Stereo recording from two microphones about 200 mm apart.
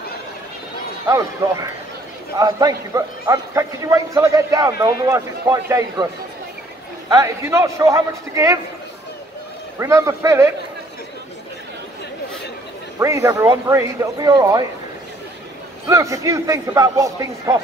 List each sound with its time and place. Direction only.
1.0 s a man's voice: 15° right (ahead or behind)
7.2 s a man's voice: 15° right (ahead or behind)
9.8 s a man's voice: 15° right (ahead or behind)
13.0 s a man's voice: 15° right (ahead or behind)
15.9 s a man's voice: 15° right (ahead or behind)